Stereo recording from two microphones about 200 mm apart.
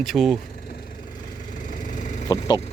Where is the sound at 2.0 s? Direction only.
40° left (ahead or behind).